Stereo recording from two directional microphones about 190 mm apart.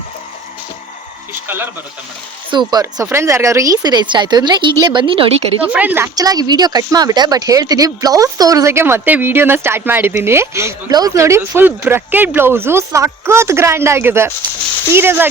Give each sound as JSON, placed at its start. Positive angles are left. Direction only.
{"t": 2.5, "sound": "speech", "side_deg": -20}
{"t": 5.6, "sound": "speech", "side_deg": -10}